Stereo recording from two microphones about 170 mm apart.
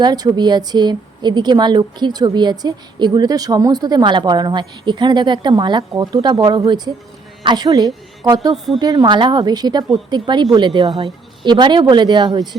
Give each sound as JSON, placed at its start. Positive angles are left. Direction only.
{"t": 0.0, "sound": "a woman's voice", "side_deg": -25}
{"t": 8.5, "sound": "a woman's voice", "side_deg": 0}
{"t": 8.8, "sound": "a woman's voice", "side_deg": -25}
{"t": 11.0, "sound": "a woman's voice", "side_deg": -25}